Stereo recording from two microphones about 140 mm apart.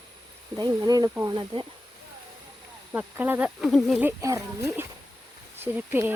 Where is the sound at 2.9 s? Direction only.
10° right (ahead or behind).